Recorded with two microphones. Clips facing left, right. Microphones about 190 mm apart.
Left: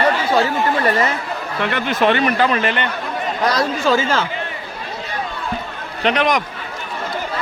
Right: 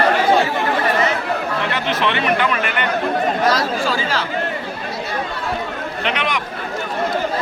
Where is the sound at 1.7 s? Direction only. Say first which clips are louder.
Left 7 dB; 45° left (ahead or behind); by 2.8 s 30° left (ahead or behind).